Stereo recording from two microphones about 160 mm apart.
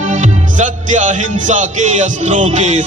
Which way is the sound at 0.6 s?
50° right (ahead or behind).